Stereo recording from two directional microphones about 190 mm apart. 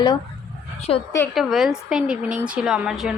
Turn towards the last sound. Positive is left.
turn(degrees=-5)  # may be behind; listen again after turning